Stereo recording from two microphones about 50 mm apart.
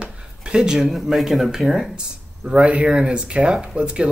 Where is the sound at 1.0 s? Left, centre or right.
Centre.